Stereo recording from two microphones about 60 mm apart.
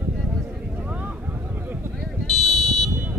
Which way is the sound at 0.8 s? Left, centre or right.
Right.